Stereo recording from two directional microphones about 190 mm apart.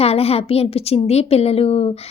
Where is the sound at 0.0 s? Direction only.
30° left (ahead or behind).